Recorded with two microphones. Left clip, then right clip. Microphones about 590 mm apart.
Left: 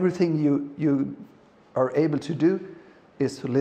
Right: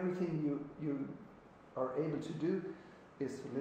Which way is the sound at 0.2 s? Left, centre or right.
Left.